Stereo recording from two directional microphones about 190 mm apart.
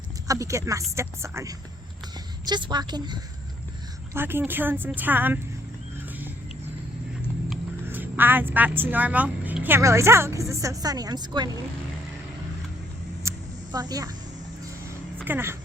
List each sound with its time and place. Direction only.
0.3 s a woman's voice: 15° right (ahead or behind)
4.1 s speech: 10° right (ahead or behind)
6.1 s a sound: 10° right (ahead or behind)
7.9 s a woman's voice: 10° right (ahead or behind)
13.2 s a sound: 15° right (ahead or behind)
13.7 s a woman's voice: 20° right (ahead or behind)
15.2 s speech: 10° right (ahead or behind)